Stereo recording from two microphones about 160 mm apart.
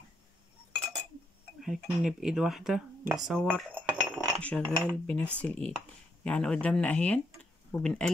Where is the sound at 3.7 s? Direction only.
10° right (ahead or behind).